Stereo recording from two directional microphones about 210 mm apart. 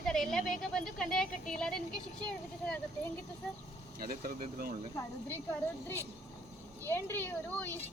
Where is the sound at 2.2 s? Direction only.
5° left (ahead or behind).